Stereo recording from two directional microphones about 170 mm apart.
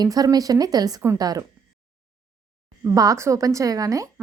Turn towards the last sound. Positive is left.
turn(degrees=-20)  # may be behind; listen again after turning